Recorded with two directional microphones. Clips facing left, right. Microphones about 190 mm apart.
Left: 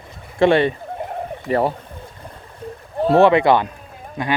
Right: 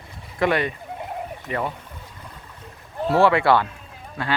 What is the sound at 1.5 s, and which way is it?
Speech, 40° left (ahead or behind).